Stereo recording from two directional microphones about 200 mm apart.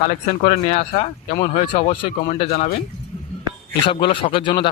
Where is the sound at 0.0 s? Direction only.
35° left (ahead or behind).